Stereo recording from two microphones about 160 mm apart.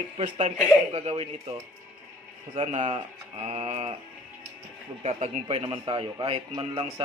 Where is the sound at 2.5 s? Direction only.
45° right (ahead or behind).